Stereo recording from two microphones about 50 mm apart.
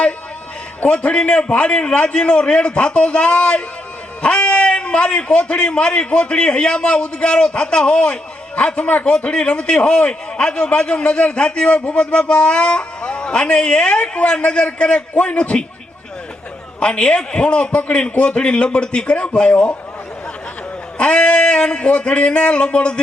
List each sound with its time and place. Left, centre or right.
0.9 s a man's voice: left
16.8 s a man's voice: left
21.0 s a man's voice: left